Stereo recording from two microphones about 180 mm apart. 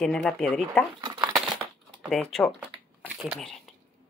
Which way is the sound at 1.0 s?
25° right (ahead or behind).